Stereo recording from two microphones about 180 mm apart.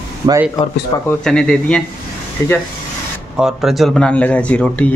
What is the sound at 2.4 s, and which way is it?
Speech, 15° left (ahead or behind).